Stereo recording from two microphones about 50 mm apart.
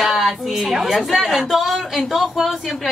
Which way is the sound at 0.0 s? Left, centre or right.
Centre.